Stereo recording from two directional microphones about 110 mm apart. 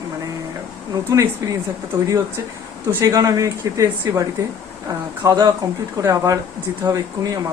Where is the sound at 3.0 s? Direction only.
30° right (ahead or behind).